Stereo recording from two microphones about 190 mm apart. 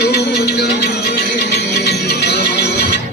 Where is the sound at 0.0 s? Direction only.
60° left (ahead or behind).